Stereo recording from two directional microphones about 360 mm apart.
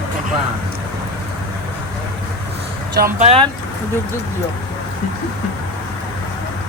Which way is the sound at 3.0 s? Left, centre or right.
Centre.